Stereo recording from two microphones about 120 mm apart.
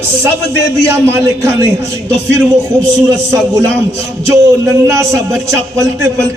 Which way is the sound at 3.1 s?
30° right (ahead or behind).